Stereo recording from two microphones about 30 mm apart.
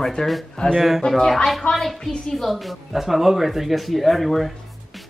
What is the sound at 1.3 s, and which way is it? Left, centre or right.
A woman's voice, centre.